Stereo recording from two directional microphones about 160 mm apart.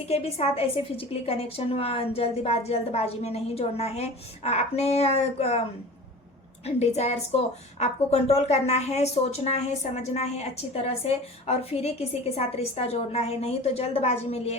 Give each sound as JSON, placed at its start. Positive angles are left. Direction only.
{"t": 0.1, "sound": "a woman's voice", "side_deg": 40}
{"t": 6.7, "sound": "a woman's voice", "side_deg": 40}